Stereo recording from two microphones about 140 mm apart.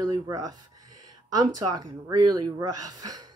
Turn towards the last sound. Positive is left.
turn(degrees=-25)  # may be behind; listen again after turning